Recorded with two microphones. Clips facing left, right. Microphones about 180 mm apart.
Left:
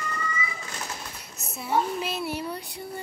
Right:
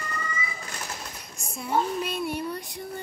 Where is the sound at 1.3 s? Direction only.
5° left (ahead or behind).